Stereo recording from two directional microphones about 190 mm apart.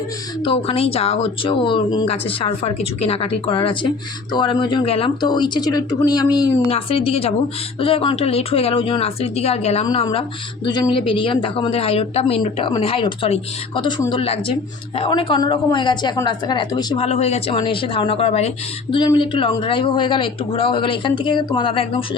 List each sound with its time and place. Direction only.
0.4 s speech: 30° left (ahead or behind)
6.7 s speech: 30° left (ahead or behind)
17.1 s speech: 35° left (ahead or behind)